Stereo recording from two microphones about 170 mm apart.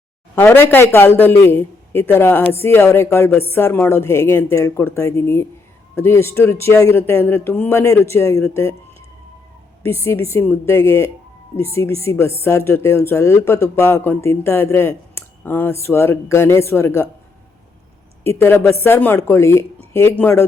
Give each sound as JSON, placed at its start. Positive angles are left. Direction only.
{"t": 0.3, "sound": "speech", "side_deg": 15}
{"t": 9.8, "sound": "speech", "side_deg": 15}
{"t": 18.2, "sound": "speech", "side_deg": 15}